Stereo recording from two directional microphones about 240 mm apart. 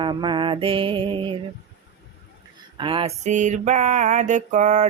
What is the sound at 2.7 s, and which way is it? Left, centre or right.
Mantra, right.